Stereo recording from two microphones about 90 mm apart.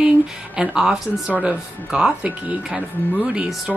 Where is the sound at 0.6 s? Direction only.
5° right (ahead or behind).